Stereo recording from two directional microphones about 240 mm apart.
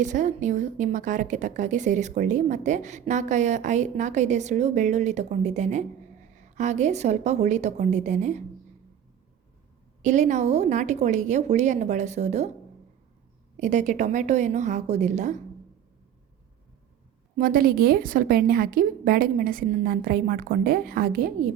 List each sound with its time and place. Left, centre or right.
0.0 s a woman's voice: right
10.0 s speech: right
13.6 s a woman's voice: right
17.3 s a woman's voice: right